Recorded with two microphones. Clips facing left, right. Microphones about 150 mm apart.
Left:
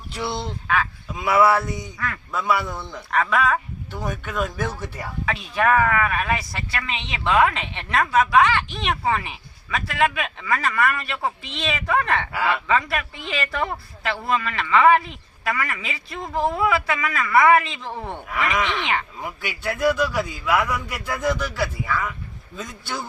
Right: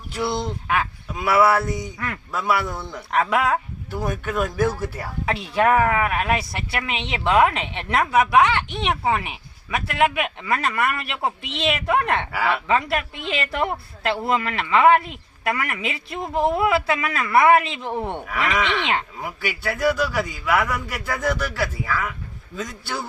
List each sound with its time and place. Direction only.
0.1 s quack: 10° right (ahead or behind)
1.1 s a man's voice: 5° right (ahead or behind)
3.9 s a man's voice: 10° right (ahead or behind)
5.2 s a man's voice: 25° right (ahead or behind)
12.3 s a man's voice: 5° right (ahead or behind)
12.6 s speech: 20° right (ahead or behind)
19.2 s a man's voice: 5° right (ahead or behind)